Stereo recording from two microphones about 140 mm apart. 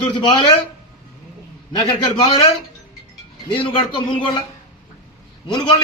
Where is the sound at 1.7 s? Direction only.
30° left (ahead or behind).